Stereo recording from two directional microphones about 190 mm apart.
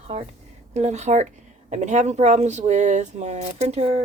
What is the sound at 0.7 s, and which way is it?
Speech, 35° right (ahead or behind).